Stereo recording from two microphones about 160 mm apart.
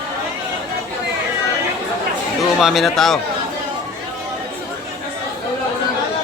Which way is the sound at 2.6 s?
Centre (ahead or behind).